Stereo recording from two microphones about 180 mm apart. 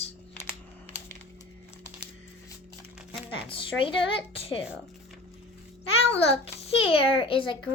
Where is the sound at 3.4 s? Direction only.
30° left (ahead or behind).